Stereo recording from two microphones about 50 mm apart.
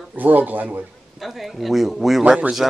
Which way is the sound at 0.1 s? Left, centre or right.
Right.